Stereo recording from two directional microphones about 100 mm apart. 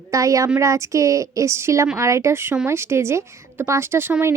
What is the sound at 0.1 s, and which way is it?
Speech, 35° right (ahead or behind).